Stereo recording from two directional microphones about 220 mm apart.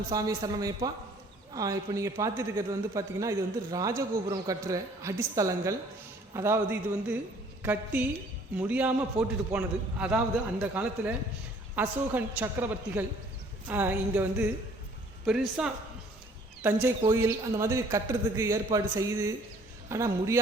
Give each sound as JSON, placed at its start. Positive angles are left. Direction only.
{"t": 0.1, "sound": "speech", "side_deg": -15}